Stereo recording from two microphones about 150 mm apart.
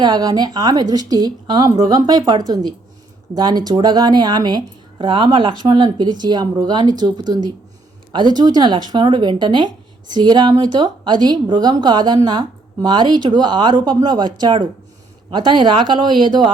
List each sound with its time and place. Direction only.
0.0 s speech: 30° right (ahead or behind)